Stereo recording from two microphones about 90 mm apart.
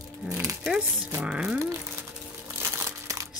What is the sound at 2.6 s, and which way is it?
Crumpling, 30° right (ahead or behind).